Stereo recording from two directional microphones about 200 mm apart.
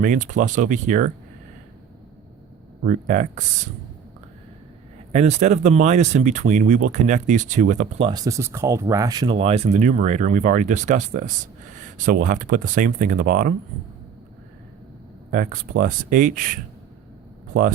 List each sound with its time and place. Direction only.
0.0 s speech: 40° right (ahead or behind)
2.8 s speech: 40° right (ahead or behind)
5.1 s speech: 35° right (ahead or behind)
15.3 s speech: 40° right (ahead or behind)